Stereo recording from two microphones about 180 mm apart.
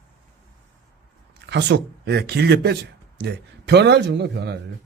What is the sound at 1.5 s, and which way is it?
Speech, 70° right (ahead or behind).